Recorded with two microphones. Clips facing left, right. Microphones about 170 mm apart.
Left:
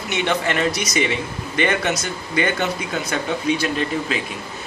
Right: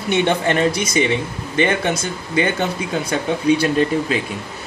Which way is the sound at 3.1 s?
35° right (ahead or behind).